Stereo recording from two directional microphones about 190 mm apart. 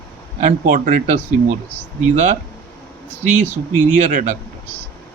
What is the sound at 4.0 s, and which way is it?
Speech, 40° right (ahead or behind).